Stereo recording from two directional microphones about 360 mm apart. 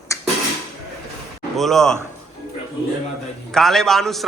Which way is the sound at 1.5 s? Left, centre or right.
Centre.